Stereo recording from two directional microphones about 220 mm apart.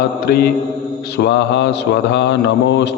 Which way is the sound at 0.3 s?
45° left (ahead or behind).